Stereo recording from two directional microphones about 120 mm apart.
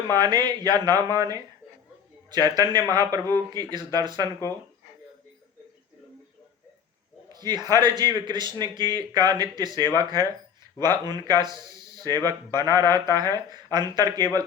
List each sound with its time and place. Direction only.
0.1 s a man's voice: 35° right (ahead or behind)
7.3 s a man's voice: 35° right (ahead or behind)